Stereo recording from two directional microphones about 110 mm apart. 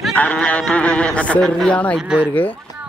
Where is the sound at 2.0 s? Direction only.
10° right (ahead or behind).